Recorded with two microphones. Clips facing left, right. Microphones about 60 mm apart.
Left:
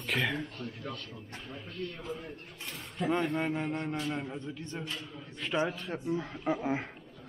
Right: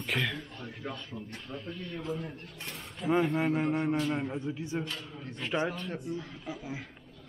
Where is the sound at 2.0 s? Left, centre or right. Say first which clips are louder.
Right 3 dB; centre.